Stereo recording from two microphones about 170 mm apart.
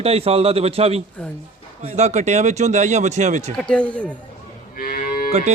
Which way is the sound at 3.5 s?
5° left (ahead or behind).